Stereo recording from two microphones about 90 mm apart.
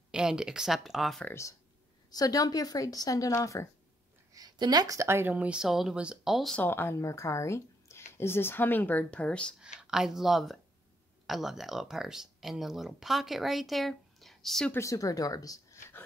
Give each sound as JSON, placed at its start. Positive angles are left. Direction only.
{"t": 0.1, "sound": "speech", "side_deg": -10}
{"t": 2.0, "sound": "speech", "side_deg": 45}
{"t": 4.3, "sound": "a woman's voice", "side_deg": -45}
{"t": 5.3, "sound": "speech", "side_deg": -15}
{"t": 6.6, "sound": "speech", "side_deg": 25}
{"t": 9.6, "sound": "speech", "side_deg": -10}
{"t": 14.7, "sound": "speech", "side_deg": 35}